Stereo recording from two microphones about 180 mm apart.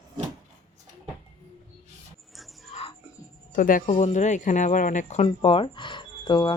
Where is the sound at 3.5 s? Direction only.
50° left (ahead or behind).